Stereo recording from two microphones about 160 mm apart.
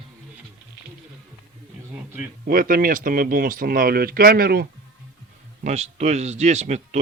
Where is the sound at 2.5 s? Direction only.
60° right (ahead or behind).